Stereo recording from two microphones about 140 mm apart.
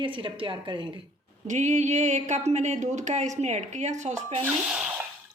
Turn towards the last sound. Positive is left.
turn(degrees=-5)  # may be behind; listen again after turning